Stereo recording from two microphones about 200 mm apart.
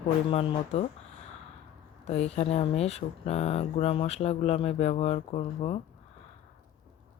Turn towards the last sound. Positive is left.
turn(degrees=30)  # may be behind; listen again after turning